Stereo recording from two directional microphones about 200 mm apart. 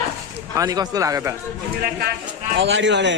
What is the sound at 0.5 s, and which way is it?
Speech, 15° right (ahead or behind).